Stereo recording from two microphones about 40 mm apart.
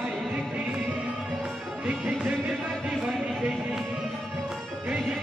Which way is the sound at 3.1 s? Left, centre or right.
Centre.